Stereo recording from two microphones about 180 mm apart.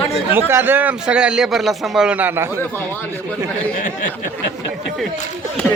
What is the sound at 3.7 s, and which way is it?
Speech, 50° left (ahead or behind).